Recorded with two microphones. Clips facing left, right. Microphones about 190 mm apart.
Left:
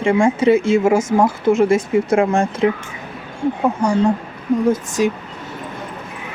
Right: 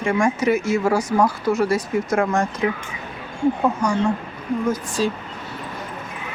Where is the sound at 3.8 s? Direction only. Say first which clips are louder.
Left 7 dB; 35° left (ahead or behind).